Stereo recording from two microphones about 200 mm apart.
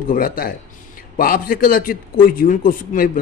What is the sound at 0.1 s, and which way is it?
A man's voice, 45° left (ahead or behind).